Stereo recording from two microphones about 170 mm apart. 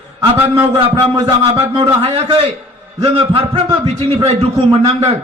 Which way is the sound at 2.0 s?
35° right (ahead or behind).